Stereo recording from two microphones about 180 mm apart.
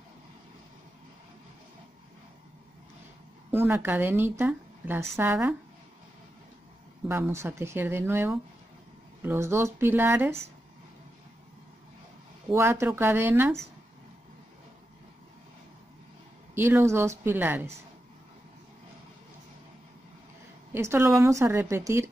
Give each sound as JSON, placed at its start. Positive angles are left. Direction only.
{"t": 3.5, "sound": "a woman's voice", "side_deg": -10}
{"t": 7.1, "sound": "a woman's voice", "side_deg": -15}
{"t": 12.4, "sound": "a woman's voice", "side_deg": -15}
{"t": 16.5, "sound": "a woman's voice", "side_deg": -15}
{"t": 20.7, "sound": "a woman's voice", "side_deg": -15}